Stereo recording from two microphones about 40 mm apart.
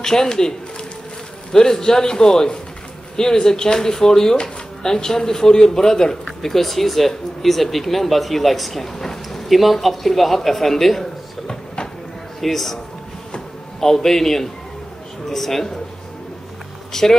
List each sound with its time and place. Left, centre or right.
0.0 s speech: centre
11.4 s a sound: centre
12.4 s speech: centre
16.9 s speech: centre